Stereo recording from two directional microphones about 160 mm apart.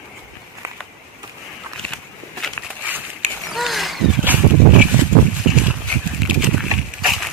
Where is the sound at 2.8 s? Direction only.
10° right (ahead or behind).